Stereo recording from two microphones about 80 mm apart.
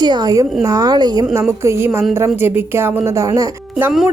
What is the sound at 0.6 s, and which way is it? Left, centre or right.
Speech, right.